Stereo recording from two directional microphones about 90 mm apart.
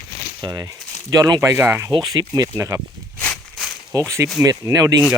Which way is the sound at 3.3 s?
Centre (ahead or behind).